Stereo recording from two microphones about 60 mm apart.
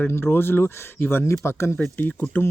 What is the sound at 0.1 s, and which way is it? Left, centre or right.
Speech, left.